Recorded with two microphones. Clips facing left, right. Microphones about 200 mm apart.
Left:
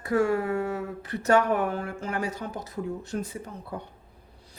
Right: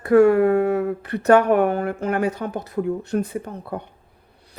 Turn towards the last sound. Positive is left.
turn(degrees=-60)  # may be behind; listen again after turning